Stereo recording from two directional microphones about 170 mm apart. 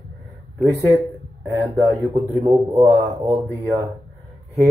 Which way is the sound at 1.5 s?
10° left (ahead or behind).